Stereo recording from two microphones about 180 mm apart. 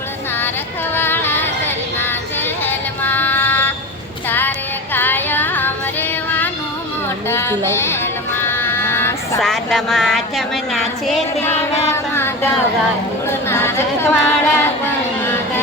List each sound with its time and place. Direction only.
0.9 s female singing: 10° left (ahead or behind)
4.3 s child singing: 10° left (ahead or behind)
4.9 s female singing: 10° left (ahead or behind)
7.3 s music: 15° left (ahead or behind)
9.4 s a woman's voice: centre (ahead or behind)
11.4 s music: 15° left (ahead or behind)
13.2 s a sound: 15° left (ahead or behind)